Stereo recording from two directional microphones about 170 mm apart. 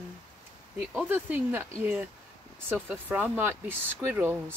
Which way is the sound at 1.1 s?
10° right (ahead or behind).